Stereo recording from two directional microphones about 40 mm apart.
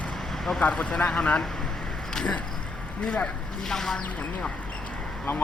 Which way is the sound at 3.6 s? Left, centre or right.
Centre.